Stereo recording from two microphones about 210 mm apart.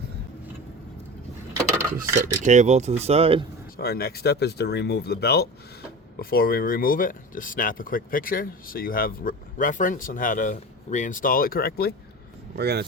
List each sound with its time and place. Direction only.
2.4 s speech: 35° right (ahead or behind)
3.8 s speech: 45° left (ahead or behind)
12.5 s speech: 50° right (ahead or behind)